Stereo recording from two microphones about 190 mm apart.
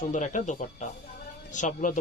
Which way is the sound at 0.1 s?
40° left (ahead or behind).